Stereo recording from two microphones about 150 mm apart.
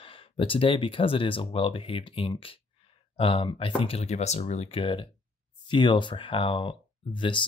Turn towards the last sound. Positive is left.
turn(degrees=30)  # may be behind; listen again after turning